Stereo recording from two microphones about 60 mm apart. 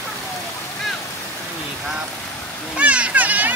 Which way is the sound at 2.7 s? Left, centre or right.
Right.